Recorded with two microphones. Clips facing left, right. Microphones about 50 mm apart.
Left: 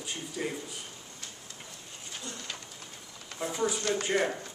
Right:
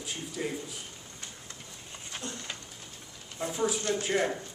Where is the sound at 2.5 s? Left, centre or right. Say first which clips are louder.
Even; centre.